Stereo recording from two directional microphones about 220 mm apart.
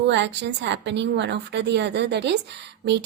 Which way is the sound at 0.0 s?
50° right (ahead or behind).